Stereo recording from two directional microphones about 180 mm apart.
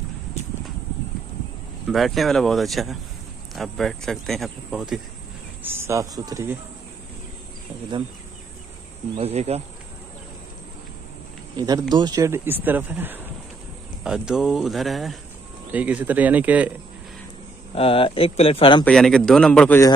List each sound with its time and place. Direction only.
1.9 s speech: centre (ahead or behind); by 6.6 s 15° right (ahead or behind)
9.1 s speech: 35° right (ahead or behind)
11.5 s speech: 20° right (ahead or behind)
17.7 s speech: 30° left (ahead or behind)
18.9 s speech: 5° left (ahead or behind)